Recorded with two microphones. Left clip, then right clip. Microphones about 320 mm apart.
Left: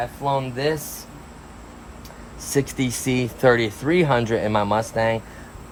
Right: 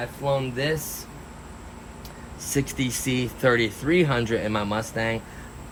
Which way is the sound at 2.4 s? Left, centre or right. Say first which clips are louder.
Left 4 dB; centre.